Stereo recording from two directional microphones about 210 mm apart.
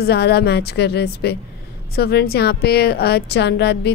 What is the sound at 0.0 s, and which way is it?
A woman's voice, 50° left (ahead or behind).